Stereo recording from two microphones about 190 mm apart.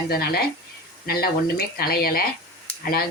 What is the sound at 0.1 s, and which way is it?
Speech, 55° left (ahead or behind).